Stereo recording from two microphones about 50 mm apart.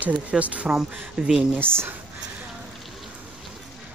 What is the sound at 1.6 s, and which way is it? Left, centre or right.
Speech, right.